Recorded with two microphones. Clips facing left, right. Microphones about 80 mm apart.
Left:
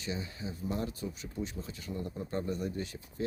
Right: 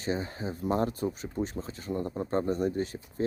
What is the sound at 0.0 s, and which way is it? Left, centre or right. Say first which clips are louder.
Speech: right 7 dB; right.